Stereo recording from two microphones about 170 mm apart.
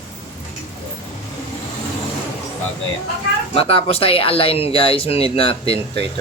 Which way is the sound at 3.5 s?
35° left (ahead or behind).